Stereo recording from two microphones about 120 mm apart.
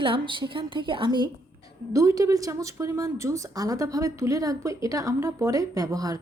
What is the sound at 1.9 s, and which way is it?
A woman's voice, 25° right (ahead or behind).